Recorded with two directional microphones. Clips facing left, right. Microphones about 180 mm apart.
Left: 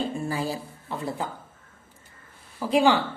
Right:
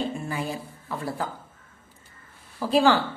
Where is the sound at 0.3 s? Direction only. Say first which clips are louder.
Left 2 dB; 35° left (ahead or behind).